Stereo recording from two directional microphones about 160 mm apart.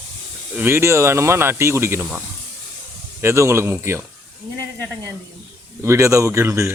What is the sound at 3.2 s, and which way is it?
Speech, 15° right (ahead or behind).